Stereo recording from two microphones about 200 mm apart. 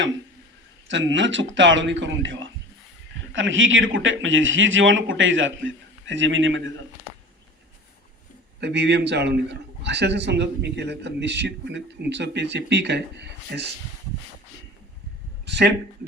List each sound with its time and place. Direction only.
0.9 s a man's voice: 65° right (ahead or behind)
8.6 s a man's voice: 60° right (ahead or behind)
15.4 s speech: 60° right (ahead or behind)